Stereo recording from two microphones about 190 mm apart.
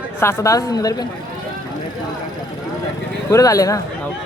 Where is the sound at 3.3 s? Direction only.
15° left (ahead or behind).